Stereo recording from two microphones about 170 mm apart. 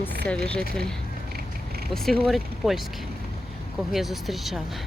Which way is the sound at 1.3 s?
65° right (ahead or behind).